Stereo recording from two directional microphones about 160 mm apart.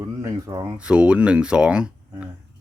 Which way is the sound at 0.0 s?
20° right (ahead or behind).